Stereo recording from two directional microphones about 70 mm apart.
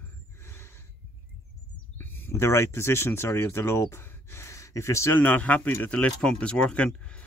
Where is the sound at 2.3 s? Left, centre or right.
Left.